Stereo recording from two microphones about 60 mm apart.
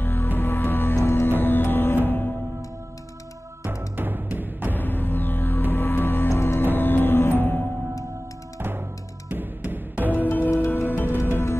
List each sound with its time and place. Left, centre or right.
0.0 s music: left
3.6 s music: right
4.7 s music: left
8.5 s music: right
10.5 s music: left